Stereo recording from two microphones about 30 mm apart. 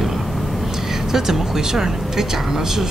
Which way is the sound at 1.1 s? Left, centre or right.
Centre.